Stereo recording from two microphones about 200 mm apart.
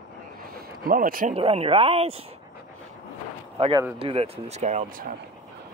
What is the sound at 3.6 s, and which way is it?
Speech, 20° right (ahead or behind).